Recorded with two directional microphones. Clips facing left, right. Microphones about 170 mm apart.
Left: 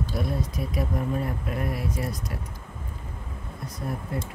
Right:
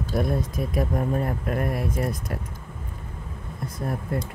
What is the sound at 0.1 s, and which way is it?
Speech, 50° right (ahead or behind).